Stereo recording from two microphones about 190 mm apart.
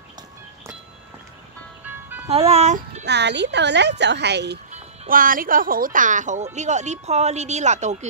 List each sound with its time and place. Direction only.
1.9 s music: 10° right (ahead or behind)
2.2 s speech: 35° right (ahead or behind)
3.1 s a woman's voice: 65° right (ahead or behind)
5.1 s a woman's voice: 45° right (ahead or behind)